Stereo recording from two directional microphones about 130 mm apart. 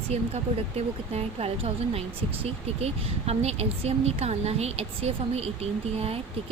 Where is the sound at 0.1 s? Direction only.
55° right (ahead or behind).